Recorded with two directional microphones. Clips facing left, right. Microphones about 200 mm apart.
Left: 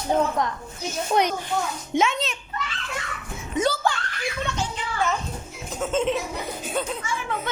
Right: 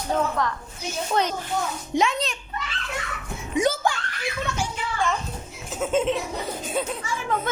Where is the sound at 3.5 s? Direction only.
15° right (ahead or behind).